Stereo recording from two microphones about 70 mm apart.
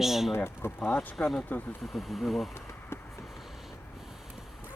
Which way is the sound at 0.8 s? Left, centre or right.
Left.